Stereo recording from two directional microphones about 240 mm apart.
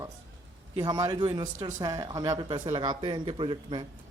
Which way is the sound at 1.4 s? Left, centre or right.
Right.